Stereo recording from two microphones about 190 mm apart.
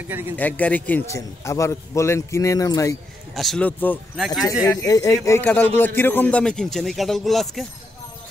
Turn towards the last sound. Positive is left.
turn(degrees=0)  # may be behind; listen again after turning